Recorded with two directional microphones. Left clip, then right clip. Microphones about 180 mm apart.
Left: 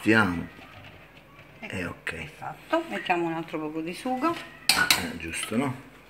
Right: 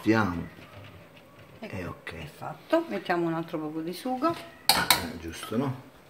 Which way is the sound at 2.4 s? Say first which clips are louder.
Right 1 dB; 25° right (ahead or behind).